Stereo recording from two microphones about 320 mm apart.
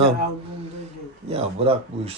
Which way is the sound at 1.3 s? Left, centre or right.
Centre.